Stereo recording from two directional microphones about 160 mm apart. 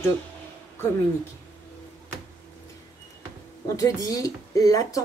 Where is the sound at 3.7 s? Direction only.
20° left (ahead or behind).